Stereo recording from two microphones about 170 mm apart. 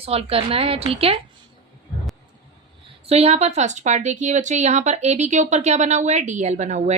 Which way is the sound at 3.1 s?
40° right (ahead or behind).